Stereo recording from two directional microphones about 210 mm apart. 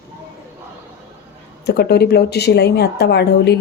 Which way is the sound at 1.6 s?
50° left (ahead or behind).